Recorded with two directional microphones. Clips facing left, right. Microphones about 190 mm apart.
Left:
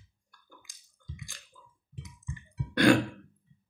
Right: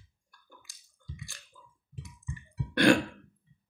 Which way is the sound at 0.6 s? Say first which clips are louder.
Even; 15° left (ahead or behind).